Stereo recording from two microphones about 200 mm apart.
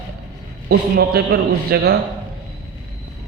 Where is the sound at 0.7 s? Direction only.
50° right (ahead or behind).